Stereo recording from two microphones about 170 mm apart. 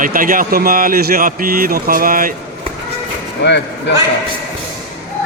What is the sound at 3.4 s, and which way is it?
Speech, 90° left.